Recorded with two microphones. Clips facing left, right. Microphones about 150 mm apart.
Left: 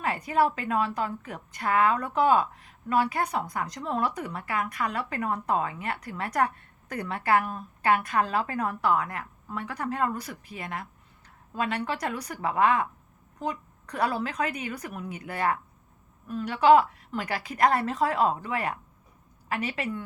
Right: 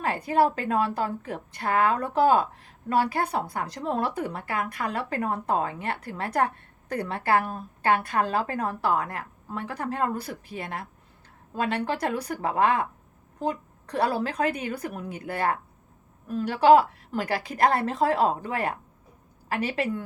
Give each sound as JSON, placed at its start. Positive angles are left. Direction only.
{"t": 0.0, "sound": "speech", "side_deg": -35}
{"t": 9.8, "sound": "speech", "side_deg": -45}
{"t": 10.2, "sound": "speech", "side_deg": -35}
{"t": 13.9, "sound": "speech", "side_deg": -35}
{"t": 14.8, "sound": "speech", "side_deg": -45}
{"t": 15.3, "sound": "a woman's voice", "side_deg": -35}
{"t": 19.5, "sound": "speech", "side_deg": -35}